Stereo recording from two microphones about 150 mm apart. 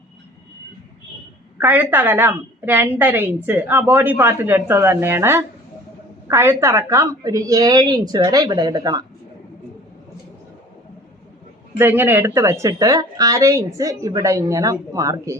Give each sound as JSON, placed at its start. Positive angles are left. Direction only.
{"t": 1.5, "sound": "a woman's voice", "side_deg": -10}
{"t": 11.8, "sound": "a woman's voice", "side_deg": -15}